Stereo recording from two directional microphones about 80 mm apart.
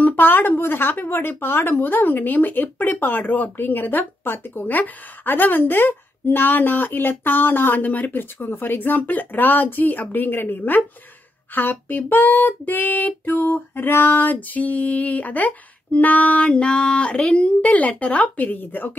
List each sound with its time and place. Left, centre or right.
0.0 s a woman's voice: left